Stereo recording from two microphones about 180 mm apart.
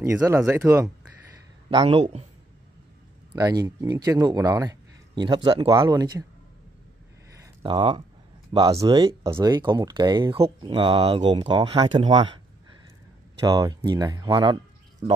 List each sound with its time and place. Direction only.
0.0 s speech: 15° right (ahead or behind)
1.7 s speech: 25° right (ahead or behind)
3.3 s speech: 20° right (ahead or behind)
7.6 s speech: 30° right (ahead or behind)
13.5 s speech: 25° right (ahead or behind)